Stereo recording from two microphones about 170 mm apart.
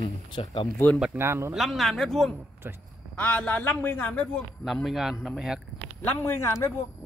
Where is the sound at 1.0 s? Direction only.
15° right (ahead or behind).